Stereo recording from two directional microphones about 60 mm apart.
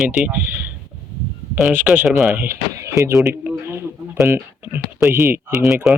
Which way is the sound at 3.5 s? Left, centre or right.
Right.